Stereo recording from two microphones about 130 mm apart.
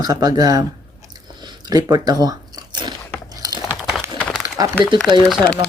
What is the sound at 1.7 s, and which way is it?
Speech, 30° right (ahead or behind).